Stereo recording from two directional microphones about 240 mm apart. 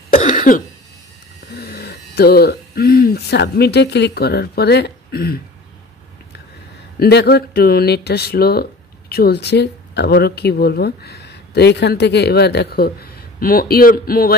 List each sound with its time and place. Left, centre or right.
0.1 s cough: left
1.6 s speech: left
7.0 s speech: left